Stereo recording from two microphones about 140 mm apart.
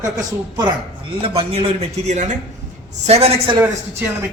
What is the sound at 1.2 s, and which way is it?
Speech, 40° right (ahead or behind).